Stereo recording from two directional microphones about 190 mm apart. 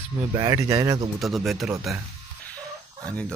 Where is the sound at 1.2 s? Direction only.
Centre (ahead or behind).